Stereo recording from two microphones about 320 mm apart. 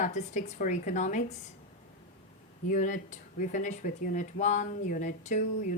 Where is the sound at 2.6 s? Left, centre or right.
Left.